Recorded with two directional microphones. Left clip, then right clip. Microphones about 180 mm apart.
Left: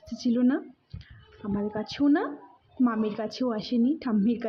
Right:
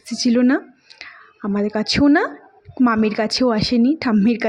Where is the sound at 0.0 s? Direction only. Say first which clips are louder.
Right 9 dB; 75° right (ahead or behind).